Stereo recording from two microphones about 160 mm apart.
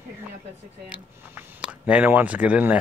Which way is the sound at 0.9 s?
10° right (ahead or behind).